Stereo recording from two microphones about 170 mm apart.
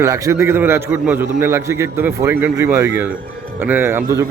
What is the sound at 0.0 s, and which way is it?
A man's voice, 15° right (ahead or behind).